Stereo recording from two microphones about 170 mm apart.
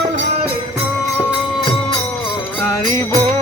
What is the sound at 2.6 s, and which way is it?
Music, 15° left (ahead or behind).